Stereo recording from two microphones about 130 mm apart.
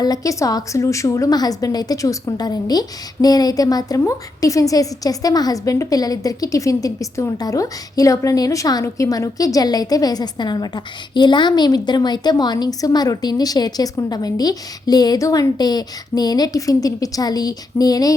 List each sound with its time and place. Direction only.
0.0 s a woman's voice: 30° left (ahead or behind)